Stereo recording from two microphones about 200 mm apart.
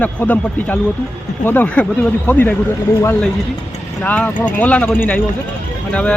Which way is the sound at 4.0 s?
5° left (ahead or behind).